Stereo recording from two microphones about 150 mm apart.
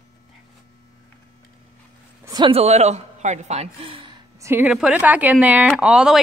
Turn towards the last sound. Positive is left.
turn(degrees=-5)  # may be behind; listen again after turning